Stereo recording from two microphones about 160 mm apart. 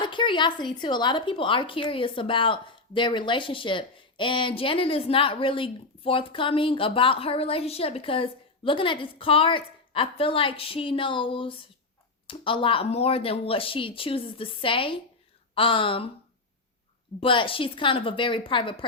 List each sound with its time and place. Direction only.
0.0 s a woman's voice: 30° left (ahead or behind)
17.2 s a woman's voice: 35° left (ahead or behind)